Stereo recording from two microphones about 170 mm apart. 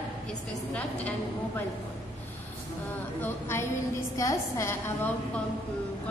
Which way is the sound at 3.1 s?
15° left (ahead or behind).